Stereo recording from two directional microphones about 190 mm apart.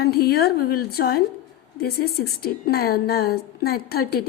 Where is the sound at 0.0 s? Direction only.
55° left (ahead or behind).